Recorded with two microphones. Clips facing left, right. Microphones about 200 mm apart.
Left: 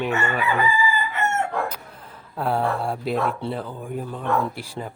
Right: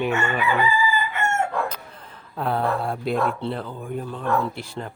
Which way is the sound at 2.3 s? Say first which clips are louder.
Even; 5° left (ahead or behind).